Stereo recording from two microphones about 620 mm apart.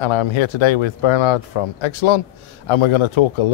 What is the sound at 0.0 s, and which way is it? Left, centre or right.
A man's voice, left.